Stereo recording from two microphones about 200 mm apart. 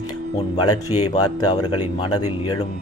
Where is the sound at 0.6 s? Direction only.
90° left.